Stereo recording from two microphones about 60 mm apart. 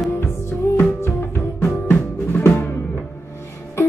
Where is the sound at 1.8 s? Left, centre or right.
Left.